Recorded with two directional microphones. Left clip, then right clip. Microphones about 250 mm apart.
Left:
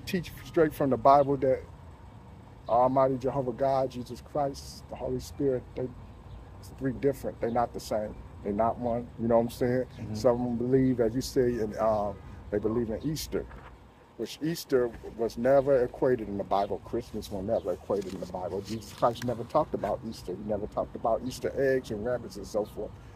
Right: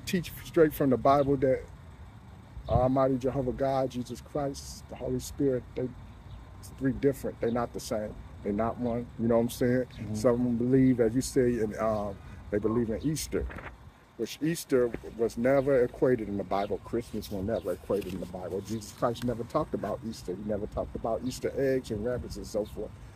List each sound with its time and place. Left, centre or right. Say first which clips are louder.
0.0 s speech: right 1 dB; right
2.7 s speech: left 2 dB; right